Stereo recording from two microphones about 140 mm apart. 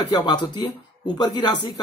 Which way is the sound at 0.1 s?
30° left (ahead or behind).